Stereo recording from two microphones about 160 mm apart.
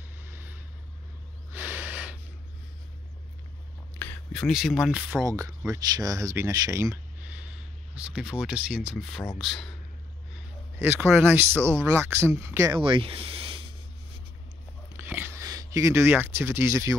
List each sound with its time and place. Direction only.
0.2 s vehicle: 15° right (ahead or behind)
1.5 s snort: 10° right (ahead or behind)
4.0 s speech: 10° left (ahead or behind)
5.1 s speech: 20° right (ahead or behind); by 9.7 s centre (ahead or behind)
10.8 s speech: 15° right (ahead or behind)
12.7 s speech: 30° right (ahead or behind)
15.0 s a sound: 10° right (ahead or behind)